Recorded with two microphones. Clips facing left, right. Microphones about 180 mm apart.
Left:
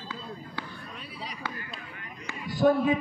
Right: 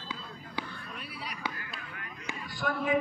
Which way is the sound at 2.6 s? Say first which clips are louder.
Left 12 dB; 30° left (ahead or behind).